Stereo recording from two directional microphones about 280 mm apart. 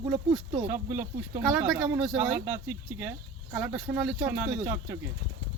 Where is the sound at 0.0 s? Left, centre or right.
Centre.